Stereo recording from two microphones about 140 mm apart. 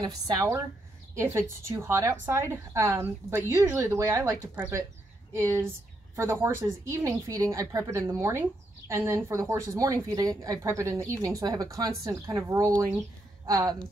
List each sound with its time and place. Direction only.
0.0 s a woman's voice: 25° right (ahead or behind)